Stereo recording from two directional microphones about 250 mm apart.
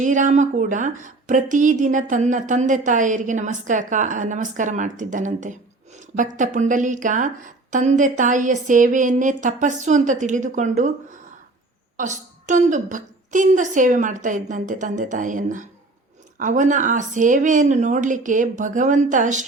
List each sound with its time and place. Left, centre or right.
0.0 s a woman's voice: right
11.9 s a woman's voice: right